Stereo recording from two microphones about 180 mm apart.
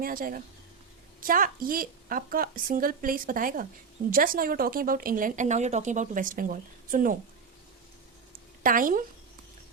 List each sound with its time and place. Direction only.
0.0 s a woman's voice: 50° right (ahead or behind)
8.6 s a woman's voice: 50° right (ahead or behind)